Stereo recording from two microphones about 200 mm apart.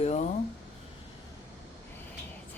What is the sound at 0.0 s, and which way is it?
Speech, 30° left (ahead or behind).